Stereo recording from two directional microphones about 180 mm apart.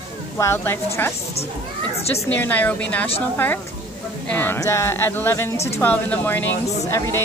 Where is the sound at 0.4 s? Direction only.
15° left (ahead or behind).